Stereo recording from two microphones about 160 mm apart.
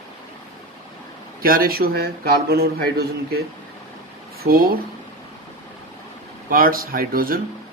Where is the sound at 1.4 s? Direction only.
65° right (ahead or behind).